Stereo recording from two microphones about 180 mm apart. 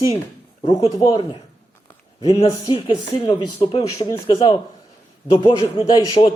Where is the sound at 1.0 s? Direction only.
20° left (ahead or behind).